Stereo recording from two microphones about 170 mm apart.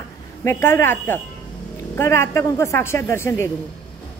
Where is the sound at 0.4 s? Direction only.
15° left (ahead or behind).